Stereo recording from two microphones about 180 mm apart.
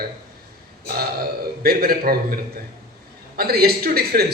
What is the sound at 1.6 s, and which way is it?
A man's voice, 55° right (ahead or behind).